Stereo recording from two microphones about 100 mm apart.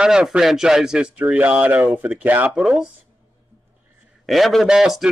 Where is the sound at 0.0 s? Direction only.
10° right (ahead or behind).